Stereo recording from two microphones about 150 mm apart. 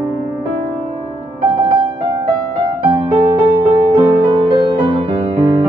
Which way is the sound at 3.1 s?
40° right (ahead or behind).